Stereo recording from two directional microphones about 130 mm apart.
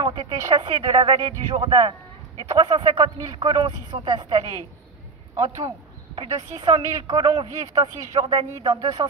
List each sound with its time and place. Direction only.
0.0 s a sound: 40° right (ahead or behind)
0.6 s a man's voice: 35° right (ahead or behind)
6.1 s speech: 40° right (ahead or behind)